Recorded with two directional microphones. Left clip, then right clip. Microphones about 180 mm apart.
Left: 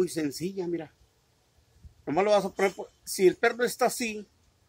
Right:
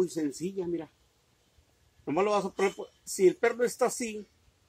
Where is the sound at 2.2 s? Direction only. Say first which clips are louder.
Left 4 dB; centre (ahead or behind).